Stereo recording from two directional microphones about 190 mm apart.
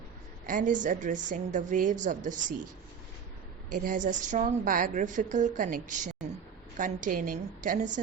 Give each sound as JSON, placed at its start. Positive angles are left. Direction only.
{"t": 0.4, "sound": "a woman's voice", "side_deg": -45}
{"t": 3.7, "sound": "a woman's voice", "side_deg": -45}